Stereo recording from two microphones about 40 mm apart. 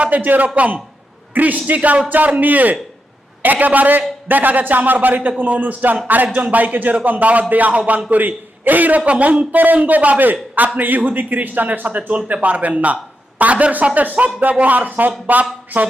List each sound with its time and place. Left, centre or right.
0.1 s a man's voice: right
9.0 s a man's voice: right